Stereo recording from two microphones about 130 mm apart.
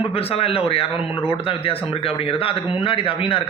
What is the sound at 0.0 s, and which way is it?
A man's voice, 50° left (ahead or behind).